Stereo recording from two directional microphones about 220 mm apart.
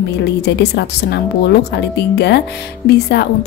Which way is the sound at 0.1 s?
50° left (ahead or behind).